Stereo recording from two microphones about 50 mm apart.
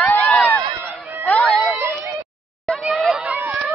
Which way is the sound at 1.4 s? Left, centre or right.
Centre.